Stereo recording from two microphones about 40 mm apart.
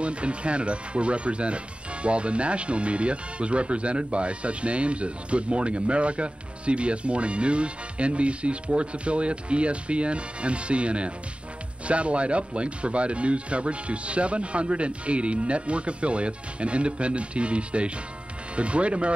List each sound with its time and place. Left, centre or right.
0.0 s speech: right